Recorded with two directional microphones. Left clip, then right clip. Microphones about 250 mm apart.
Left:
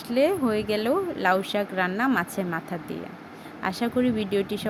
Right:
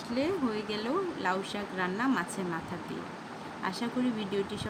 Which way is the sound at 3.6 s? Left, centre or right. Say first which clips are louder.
Left 8 dB; left.